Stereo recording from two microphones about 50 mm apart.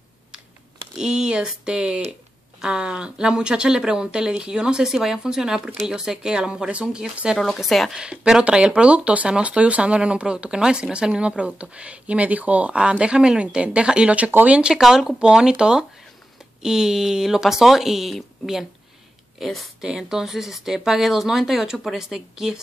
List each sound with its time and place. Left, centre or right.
0.9 s speech: centre
7.3 s speech: centre
7.9 s speech: centre; by 14.6 s right
14.6 s a woman's voice: centre
19.8 s speech: centre